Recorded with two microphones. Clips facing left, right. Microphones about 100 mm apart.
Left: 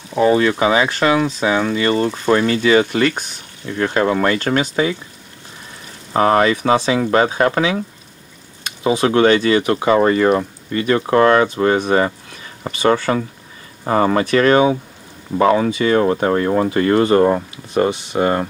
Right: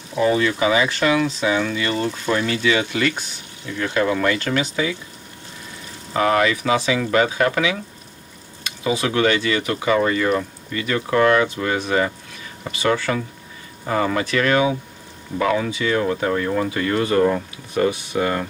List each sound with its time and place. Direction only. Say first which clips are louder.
0.1 s speech: left 4 dB; 35° left (ahead or behind)
6.1 s speech: left 4 dB; 35° left (ahead or behind)